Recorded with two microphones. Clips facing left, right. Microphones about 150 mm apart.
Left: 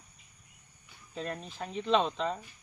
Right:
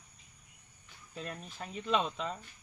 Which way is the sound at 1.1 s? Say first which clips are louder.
Left 5 dB; 45° left (ahead or behind).